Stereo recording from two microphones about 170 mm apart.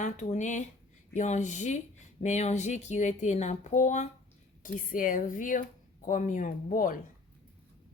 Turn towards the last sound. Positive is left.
turn(degrees=55)  # may be behind; listen again after turning